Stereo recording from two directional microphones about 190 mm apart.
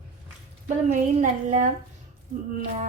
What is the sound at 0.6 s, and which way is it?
Speech, 40° right (ahead or behind).